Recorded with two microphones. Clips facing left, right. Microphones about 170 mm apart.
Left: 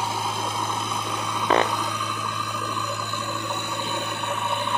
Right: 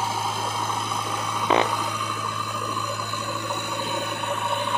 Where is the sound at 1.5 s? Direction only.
15° right (ahead or behind).